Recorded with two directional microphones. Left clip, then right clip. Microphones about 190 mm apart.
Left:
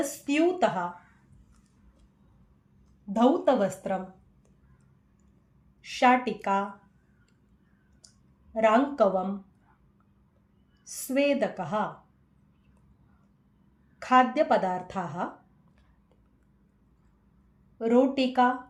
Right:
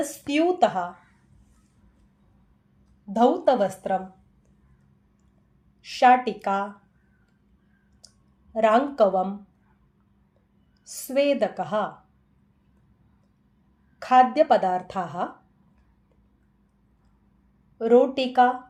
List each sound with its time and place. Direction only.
0.0 s a woman's voice: 30° right (ahead or behind)
3.1 s a woman's voice: 35° right (ahead or behind)
5.8 s a woman's voice: 35° right (ahead or behind)
8.5 s a woman's voice: 35° right (ahead or behind)
10.8 s a woman's voice: 35° right (ahead or behind)
14.0 s a woman's voice: 35° right (ahead or behind)
17.7 s a woman's voice: 35° right (ahead or behind)